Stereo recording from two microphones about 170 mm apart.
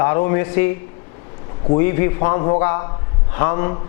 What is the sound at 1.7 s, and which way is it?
A man's voice, 15° left (ahead or behind).